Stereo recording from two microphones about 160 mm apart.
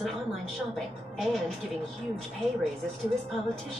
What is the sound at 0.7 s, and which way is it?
Speech, centre (ahead or behind).